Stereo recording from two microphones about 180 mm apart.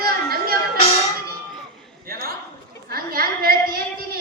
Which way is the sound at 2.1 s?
55° right (ahead or behind).